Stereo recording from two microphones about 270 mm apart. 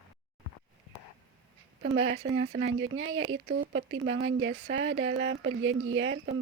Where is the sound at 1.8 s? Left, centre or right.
Right.